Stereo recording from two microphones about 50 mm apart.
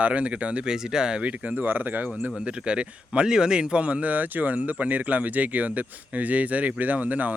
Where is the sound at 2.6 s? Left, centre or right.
Right.